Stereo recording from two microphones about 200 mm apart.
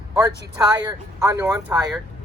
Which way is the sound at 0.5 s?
20° right (ahead or behind).